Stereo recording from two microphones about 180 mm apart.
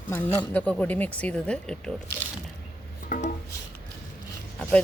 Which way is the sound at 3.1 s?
45° left (ahead or behind).